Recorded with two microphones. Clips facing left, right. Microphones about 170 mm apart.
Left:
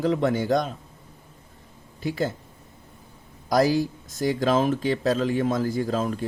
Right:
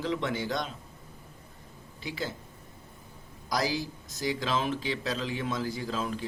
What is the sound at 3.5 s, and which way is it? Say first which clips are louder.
Speech: left 10 dB; 50° left (ahead or behind).